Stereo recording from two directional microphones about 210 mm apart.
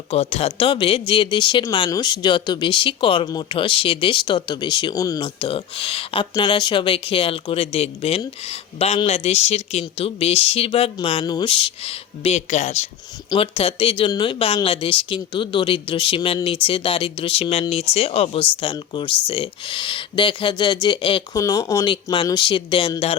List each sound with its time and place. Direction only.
0.1 s speech: 30° left (ahead or behind)